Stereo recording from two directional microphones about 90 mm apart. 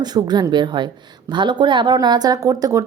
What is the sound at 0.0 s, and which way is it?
A woman's voice, 50° right (ahead or behind).